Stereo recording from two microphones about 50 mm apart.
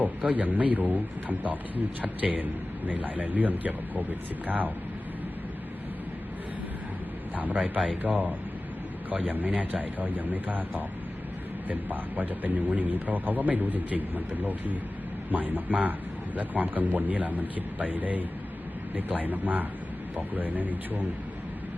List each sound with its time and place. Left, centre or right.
0.0 s a man's voice: right
7.3 s a man's voice: right